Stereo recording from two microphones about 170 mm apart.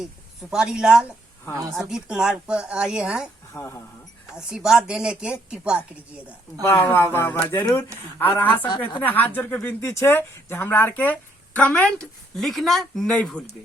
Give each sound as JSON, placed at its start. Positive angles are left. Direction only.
{"t": 0.5, "sound": "a woman's voice", "side_deg": -5}
{"t": 3.5, "sound": "speech", "side_deg": 15}
{"t": 4.4, "sound": "a woman's voice", "side_deg": -5}
{"t": 6.7, "sound": "speech", "side_deg": 15}